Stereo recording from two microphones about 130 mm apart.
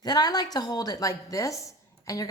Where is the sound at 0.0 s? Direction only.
35° left (ahead or behind).